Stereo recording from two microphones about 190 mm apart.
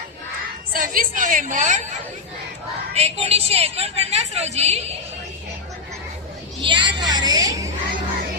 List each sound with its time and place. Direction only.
0.7 s a woman's voice: 45° right (ahead or behind)
6.6 s speech: 25° right (ahead or behind)